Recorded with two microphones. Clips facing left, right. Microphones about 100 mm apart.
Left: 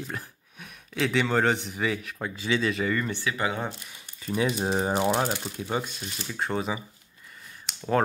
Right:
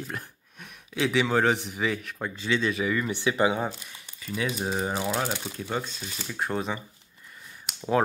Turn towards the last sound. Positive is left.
turn(degrees=-5)  # may be behind; listen again after turning